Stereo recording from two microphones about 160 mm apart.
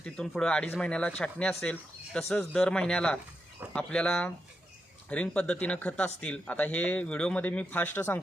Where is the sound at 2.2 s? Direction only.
15° left (ahead or behind).